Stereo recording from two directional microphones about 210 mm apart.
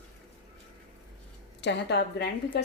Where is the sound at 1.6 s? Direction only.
55° left (ahead or behind).